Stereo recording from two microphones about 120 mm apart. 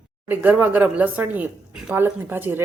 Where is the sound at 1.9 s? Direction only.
15° right (ahead or behind).